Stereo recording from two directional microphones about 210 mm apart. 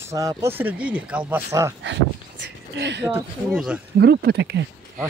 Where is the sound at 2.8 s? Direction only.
55° right (ahead or behind).